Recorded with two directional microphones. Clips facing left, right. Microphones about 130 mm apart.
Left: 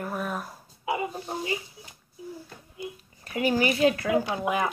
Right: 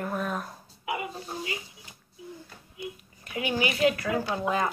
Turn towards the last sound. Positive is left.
turn(degrees=15)  # may be behind; listen again after turning